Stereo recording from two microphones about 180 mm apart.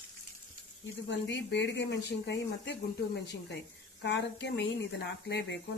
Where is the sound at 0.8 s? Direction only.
85° left.